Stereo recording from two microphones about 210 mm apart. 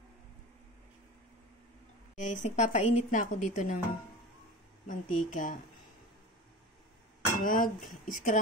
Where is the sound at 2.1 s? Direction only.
35° left (ahead or behind).